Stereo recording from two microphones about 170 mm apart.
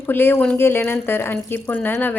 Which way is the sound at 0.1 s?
10° left (ahead or behind).